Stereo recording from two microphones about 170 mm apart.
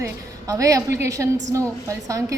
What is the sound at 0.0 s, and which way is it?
A woman's voice, 20° right (ahead or behind).